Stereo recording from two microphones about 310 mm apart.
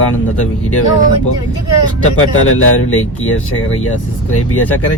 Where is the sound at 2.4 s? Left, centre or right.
Left.